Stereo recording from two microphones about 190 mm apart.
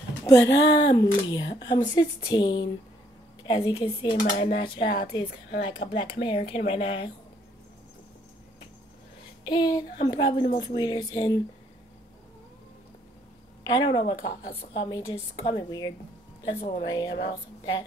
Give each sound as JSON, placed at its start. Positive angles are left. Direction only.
{"t": 0.2, "sound": "speech", "side_deg": 15}
{"t": 4.8, "sound": "speech", "side_deg": 55}
{"t": 6.2, "sound": "speech", "side_deg": 30}
{"t": 9.4, "sound": "speech", "side_deg": 20}
{"t": 13.7, "sound": "a woman's voice", "side_deg": 25}
{"t": 16.8, "sound": "speech", "side_deg": 20}